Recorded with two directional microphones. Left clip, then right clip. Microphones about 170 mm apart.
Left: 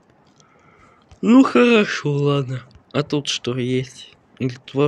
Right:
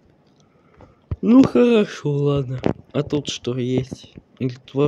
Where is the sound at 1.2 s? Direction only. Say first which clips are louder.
Left 1 dB; 5° right (ahead or behind).